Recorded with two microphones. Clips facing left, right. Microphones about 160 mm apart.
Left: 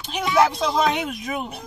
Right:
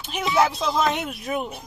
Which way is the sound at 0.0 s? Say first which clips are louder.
Left 2 dB; 5° right (ahead or behind).